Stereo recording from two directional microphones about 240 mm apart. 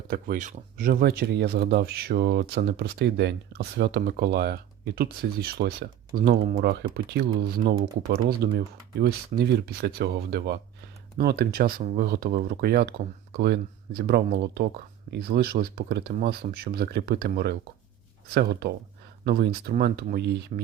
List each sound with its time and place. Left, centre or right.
0.1 s speech: right